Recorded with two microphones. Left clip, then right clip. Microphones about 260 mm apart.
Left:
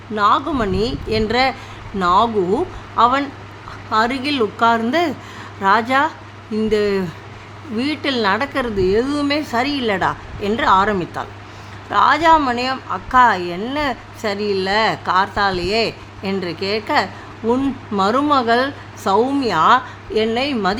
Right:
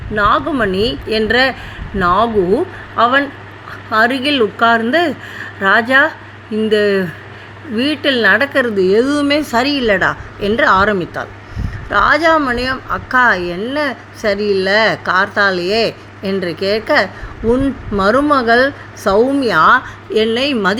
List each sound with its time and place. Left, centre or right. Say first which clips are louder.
0.2 s speech: right 3 dB; centre